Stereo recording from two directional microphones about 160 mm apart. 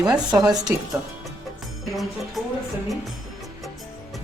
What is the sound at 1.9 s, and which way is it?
Music, centre (ahead or behind).